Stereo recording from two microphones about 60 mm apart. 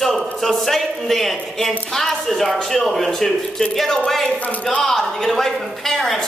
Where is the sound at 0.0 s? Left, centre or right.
Centre.